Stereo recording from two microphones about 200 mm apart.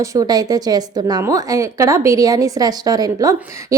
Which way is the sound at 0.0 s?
15° right (ahead or behind).